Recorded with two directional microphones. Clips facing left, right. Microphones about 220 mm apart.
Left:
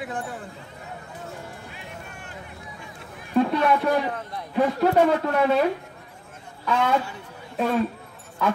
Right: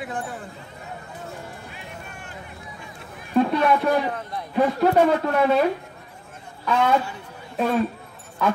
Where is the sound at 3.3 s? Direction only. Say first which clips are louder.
Right 1 dB; 40° right (ahead or behind).